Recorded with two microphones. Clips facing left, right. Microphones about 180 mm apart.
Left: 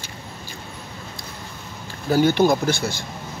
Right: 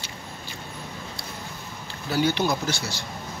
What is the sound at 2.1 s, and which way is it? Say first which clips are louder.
Speech: left 7 dB; 45° left (ahead or behind).